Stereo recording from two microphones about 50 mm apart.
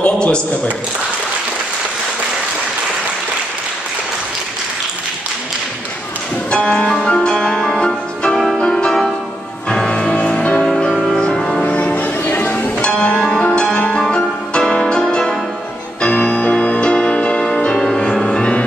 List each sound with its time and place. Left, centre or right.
0.0 s a sound: left
6.5 s music: centre
10.7 s music: centre
11.6 s music: left
13.0 s music: centre